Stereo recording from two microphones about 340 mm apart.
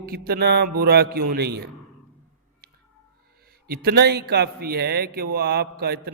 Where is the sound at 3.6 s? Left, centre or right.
Right.